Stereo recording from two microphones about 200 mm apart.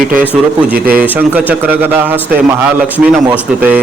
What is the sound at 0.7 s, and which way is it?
Speech, 45° right (ahead or behind).